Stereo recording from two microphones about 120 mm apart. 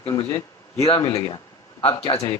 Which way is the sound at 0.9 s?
25° left (ahead or behind).